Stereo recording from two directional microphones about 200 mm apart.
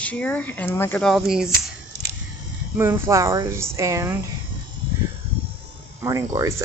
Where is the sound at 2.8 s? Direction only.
15° right (ahead or behind).